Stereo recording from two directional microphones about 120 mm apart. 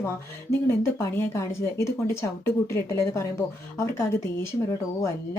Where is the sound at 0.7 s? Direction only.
20° left (ahead or behind).